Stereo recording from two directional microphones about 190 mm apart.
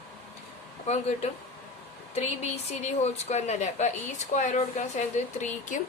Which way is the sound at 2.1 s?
35° left (ahead or behind).